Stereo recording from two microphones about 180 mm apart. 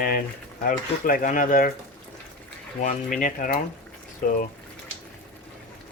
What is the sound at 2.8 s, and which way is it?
Speech, 45° left (ahead or behind).